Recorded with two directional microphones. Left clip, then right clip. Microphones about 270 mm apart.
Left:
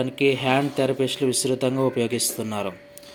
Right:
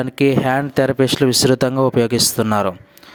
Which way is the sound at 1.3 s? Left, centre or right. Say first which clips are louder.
Right 8 dB; right.